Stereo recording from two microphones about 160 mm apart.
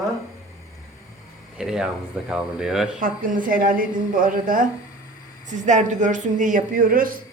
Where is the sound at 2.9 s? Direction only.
55° right (ahead or behind).